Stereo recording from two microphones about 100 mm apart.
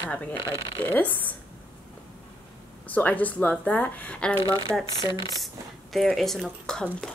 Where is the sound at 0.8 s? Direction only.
20° left (ahead or behind).